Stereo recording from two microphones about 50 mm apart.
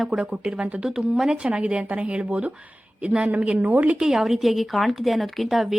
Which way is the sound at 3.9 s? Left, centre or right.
Centre.